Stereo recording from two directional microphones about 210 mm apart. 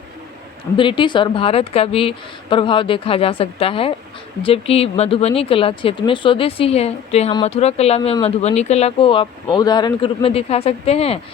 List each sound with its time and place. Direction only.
0.8 s speech: 25° left (ahead or behind)